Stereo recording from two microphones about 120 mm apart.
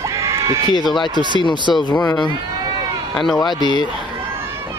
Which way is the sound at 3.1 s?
Centre (ahead or behind).